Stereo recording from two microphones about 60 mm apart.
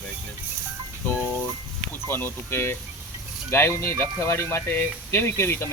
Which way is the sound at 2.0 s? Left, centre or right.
Left.